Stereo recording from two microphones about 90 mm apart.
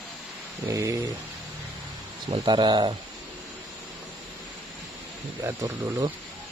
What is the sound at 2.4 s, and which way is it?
Speech, 55° right (ahead or behind).